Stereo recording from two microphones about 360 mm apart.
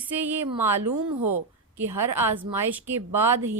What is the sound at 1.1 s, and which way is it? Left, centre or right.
Speech, right.